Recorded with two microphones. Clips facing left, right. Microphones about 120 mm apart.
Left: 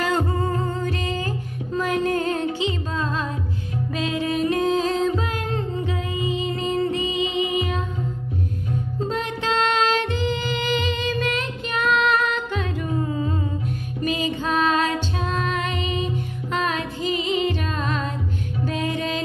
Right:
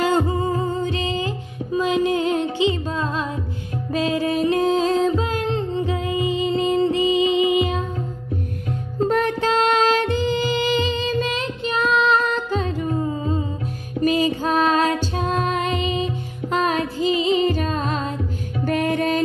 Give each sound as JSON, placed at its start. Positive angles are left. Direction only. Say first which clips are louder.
{"t": 0.3, "sound": "music", "louder": "right 3 dB", "side_deg": -15}
{"t": 0.8, "sound": "music", "louder": "right 2 dB", "side_deg": -25}
{"t": 3.9, "sound": "music", "louder": "right 4 dB", "side_deg": -35}
{"t": 9.0, "sound": "music", "louder": "right 8 dB", "side_deg": -60}
{"t": 9.4, "sound": "music", "louder": "even", "side_deg": -35}
{"t": 14.0, "sound": "music", "louder": "right 5 dB", "side_deg": -35}
{"t": 18.7, "sound": "music", "louder": "right 6 dB", "side_deg": -55}